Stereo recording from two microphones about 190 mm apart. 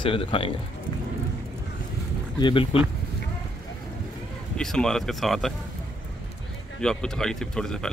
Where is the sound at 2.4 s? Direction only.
25° left (ahead or behind).